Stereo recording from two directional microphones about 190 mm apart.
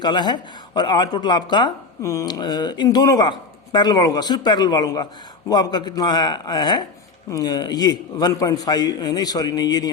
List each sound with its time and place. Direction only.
0.0 s speech: 25° left (ahead or behind)